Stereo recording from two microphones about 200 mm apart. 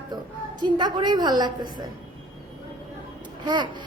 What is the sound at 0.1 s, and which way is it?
A woman's voice, 20° right (ahead or behind).